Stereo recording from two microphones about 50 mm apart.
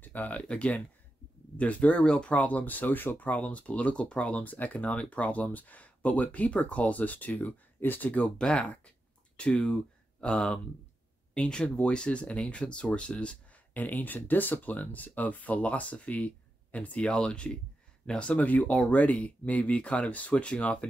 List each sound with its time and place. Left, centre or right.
0.0 s speech: left
8.2 s speech: centre
13.7 s speech: left